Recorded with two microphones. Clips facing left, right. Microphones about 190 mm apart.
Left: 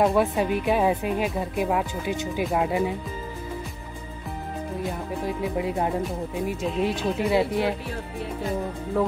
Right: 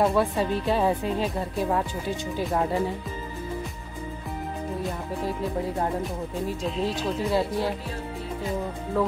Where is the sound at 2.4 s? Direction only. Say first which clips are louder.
Left 1 dB; 10° left (ahead or behind).